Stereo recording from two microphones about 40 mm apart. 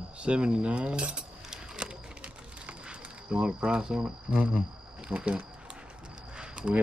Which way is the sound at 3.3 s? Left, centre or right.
Centre.